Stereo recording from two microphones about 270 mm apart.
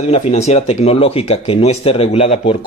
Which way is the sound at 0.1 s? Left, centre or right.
Left.